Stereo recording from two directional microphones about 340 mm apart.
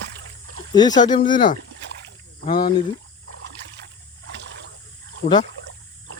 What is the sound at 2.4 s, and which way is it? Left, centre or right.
Speech, left.